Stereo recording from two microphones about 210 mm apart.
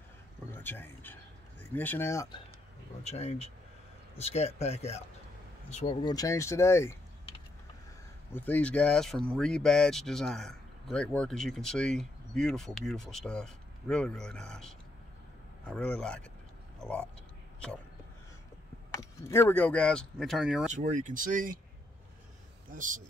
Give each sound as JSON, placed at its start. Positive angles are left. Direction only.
{"t": 0.5, "sound": "speech", "side_deg": 10}
{"t": 3.0, "sound": "speech", "side_deg": 30}
{"t": 8.3, "sound": "a man's voice", "side_deg": 10}
{"t": 18.9, "sound": "a man's voice", "side_deg": 15}
{"t": 20.7, "sound": "speech", "side_deg": -35}